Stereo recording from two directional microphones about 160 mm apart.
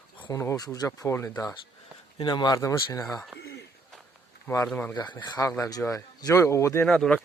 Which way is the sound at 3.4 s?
90° left.